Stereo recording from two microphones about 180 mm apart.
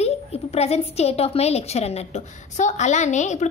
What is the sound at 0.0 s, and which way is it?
A woman's voice, 35° left (ahead or behind).